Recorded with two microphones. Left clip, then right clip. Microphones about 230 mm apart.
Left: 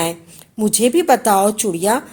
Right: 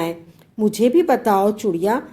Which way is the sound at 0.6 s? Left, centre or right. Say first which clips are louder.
Left 1 dB; left.